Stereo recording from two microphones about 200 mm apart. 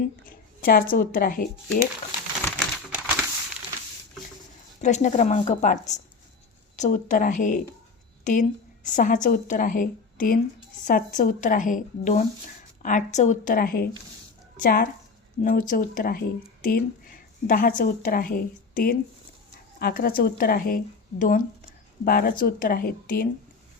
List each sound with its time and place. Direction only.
0.3 s speech: 45° left (ahead or behind)
2.4 s crumpling: 10° left (ahead or behind)
4.8 s a woman's voice: 35° left (ahead or behind)